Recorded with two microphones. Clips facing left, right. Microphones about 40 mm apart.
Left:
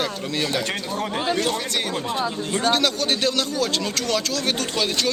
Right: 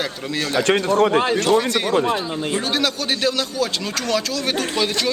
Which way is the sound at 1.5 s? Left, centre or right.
Centre.